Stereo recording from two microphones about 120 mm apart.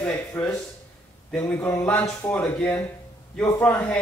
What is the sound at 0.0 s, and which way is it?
Speech, 15° left (ahead or behind).